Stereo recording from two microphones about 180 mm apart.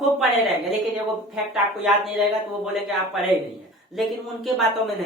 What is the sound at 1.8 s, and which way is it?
Speech, centre (ahead or behind).